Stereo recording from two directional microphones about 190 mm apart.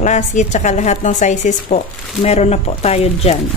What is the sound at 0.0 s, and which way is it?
A woman's voice, 40° left (ahead or behind).